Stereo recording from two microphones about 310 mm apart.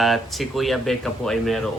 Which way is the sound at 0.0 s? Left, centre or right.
Centre.